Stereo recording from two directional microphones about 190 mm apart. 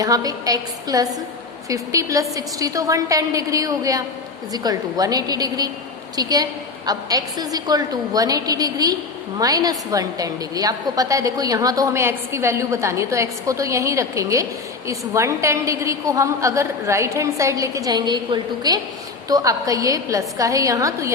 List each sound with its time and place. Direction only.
0.0 s a woman's voice: 20° right (ahead or behind)